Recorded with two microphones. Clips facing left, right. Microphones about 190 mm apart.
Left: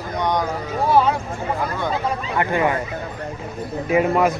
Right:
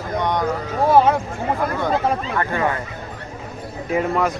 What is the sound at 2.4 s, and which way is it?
Speech, 15° left (ahead or behind).